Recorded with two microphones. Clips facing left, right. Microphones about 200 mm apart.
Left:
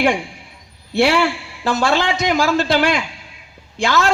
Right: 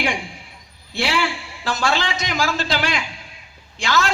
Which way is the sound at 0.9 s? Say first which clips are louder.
Left 7 dB; 60° left (ahead or behind).